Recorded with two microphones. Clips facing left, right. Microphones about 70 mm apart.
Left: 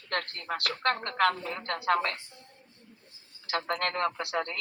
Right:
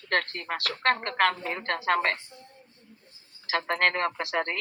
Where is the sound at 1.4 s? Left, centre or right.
Right.